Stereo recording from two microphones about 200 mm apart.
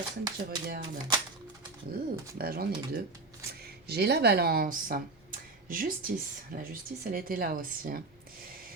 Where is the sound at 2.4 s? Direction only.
50° right (ahead or behind).